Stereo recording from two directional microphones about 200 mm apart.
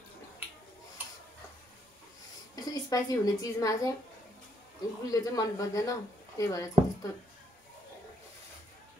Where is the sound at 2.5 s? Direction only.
20° left (ahead or behind).